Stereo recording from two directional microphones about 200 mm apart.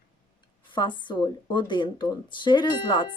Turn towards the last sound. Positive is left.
turn(degrees=20)  # may be behind; listen again after turning